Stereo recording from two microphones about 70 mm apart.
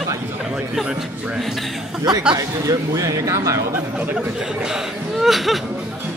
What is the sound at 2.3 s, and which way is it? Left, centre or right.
Speech, right.